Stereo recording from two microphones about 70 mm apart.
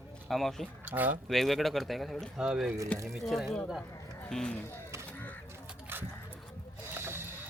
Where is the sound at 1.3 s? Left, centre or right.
Centre.